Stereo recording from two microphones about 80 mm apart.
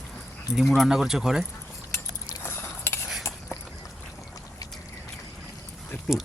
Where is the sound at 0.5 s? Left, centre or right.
Centre.